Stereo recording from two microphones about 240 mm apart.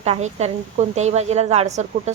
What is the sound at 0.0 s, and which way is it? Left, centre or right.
Speech, right.